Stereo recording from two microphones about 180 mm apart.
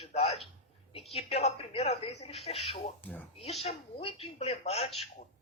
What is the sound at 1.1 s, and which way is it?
Speech, 35° left (ahead or behind).